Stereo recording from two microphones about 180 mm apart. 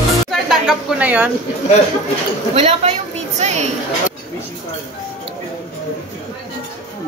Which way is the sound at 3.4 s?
40° right (ahead or behind).